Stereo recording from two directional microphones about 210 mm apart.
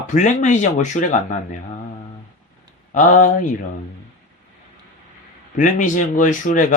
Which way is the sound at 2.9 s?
40° left (ahead or behind).